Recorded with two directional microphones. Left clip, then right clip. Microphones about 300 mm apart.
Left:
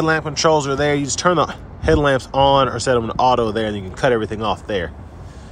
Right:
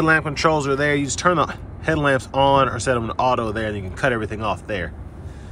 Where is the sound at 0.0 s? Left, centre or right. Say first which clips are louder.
Left 1 dB; centre.